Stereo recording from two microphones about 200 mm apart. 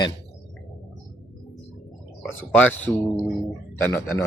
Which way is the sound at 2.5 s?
10° left (ahead or behind).